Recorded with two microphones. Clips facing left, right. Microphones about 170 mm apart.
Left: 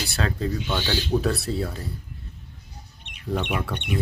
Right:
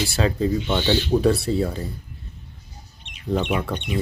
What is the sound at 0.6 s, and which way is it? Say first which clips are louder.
Speech: right 5 dB; 20° right (ahead or behind).